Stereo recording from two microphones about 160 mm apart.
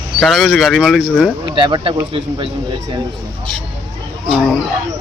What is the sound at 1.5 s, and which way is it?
Speech, 30° right (ahead or behind).